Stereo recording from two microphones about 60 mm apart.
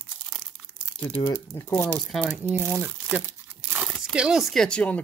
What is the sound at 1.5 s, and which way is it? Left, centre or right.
Speech, left.